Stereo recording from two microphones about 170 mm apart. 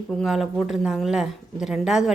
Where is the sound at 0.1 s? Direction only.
Centre (ahead or behind).